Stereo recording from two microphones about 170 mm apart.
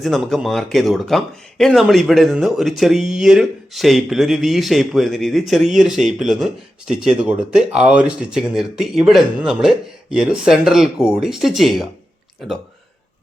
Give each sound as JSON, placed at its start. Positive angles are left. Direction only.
{"t": 0.0, "sound": "speech", "side_deg": 0}